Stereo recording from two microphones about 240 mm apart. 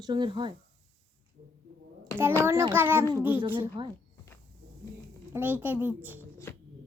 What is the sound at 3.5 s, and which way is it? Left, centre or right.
Speech, right.